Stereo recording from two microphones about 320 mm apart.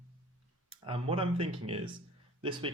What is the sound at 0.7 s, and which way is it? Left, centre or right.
Speech, centre.